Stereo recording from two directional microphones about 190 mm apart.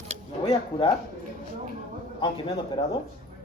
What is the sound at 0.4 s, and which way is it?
Speech, 30° left (ahead or behind).